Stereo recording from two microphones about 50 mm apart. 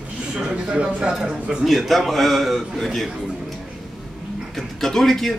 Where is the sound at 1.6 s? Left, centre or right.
Centre.